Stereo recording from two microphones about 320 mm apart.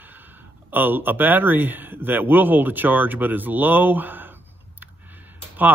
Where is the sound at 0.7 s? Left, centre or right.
Centre.